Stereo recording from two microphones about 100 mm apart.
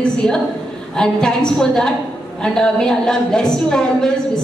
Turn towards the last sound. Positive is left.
turn(degrees=5)  # may be behind; listen again after turning